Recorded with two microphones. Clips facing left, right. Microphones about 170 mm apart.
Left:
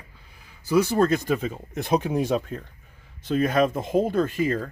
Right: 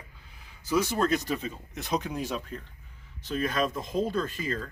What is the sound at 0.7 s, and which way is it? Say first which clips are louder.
Speech: left 6 dB; 55° left (ahead or behind).